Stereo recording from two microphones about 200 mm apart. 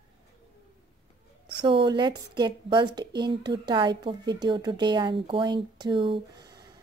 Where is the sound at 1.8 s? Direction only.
20° right (ahead or behind).